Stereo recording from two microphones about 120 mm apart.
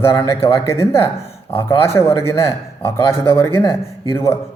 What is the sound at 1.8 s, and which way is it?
A man's voice, 20° left (ahead or behind).